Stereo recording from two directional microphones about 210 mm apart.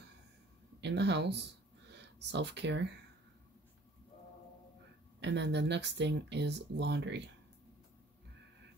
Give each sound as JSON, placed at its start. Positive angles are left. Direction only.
{"t": 0.7, "sound": "speech", "side_deg": -55}
{"t": 5.2, "sound": "speech", "side_deg": -55}